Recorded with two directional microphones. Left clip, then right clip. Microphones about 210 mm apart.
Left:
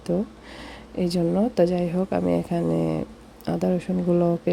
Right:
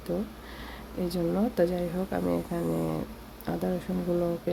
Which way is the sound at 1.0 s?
25° left (ahead or behind).